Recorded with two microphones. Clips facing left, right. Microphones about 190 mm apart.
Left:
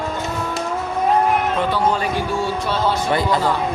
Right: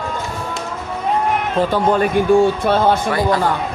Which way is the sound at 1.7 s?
55° right (ahead or behind).